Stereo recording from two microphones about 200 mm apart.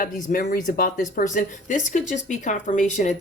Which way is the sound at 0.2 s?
45° left (ahead or behind).